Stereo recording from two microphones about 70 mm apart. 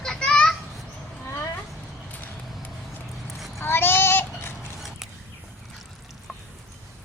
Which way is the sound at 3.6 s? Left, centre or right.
Left.